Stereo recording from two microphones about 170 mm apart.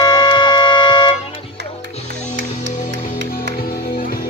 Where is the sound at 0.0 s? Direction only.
25° left (ahead or behind).